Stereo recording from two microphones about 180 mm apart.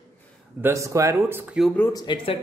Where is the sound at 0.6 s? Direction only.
15° right (ahead or behind).